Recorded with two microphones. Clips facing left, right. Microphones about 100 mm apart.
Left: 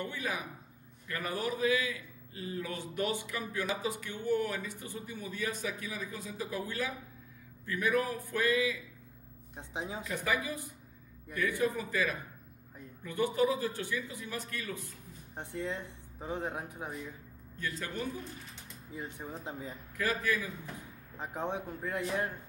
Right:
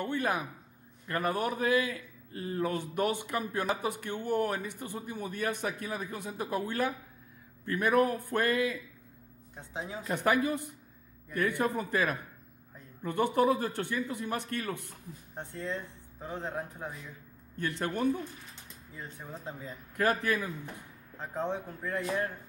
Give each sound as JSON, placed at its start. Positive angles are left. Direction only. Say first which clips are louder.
{"t": 0.0, "sound": "a sound", "louder": "right 6 dB", "side_deg": -55}
{"t": 1.0, "sound": "a man's voice", "louder": "right 5 dB", "side_deg": -55}
{"t": 9.6, "sound": "speech", "louder": "even", "side_deg": 20}
{"t": 10.1, "sound": "a man's voice", "louder": "right 7 dB", "side_deg": -60}
{"t": 15.3, "sound": "speech", "louder": "even", "side_deg": 15}
{"t": 17.6, "sound": "a man's voice", "louder": "right 5 dB", "side_deg": -65}
{"t": 18.9, "sound": "speech", "louder": "left 2 dB", "side_deg": 20}
{"t": 20.0, "sound": "a man's voice", "louder": "right 4 dB", "side_deg": -65}
{"t": 21.2, "sound": "speech", "louder": "right 2 dB", "side_deg": 15}